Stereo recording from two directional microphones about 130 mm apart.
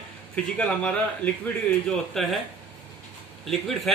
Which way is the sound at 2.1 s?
Centre (ahead or behind).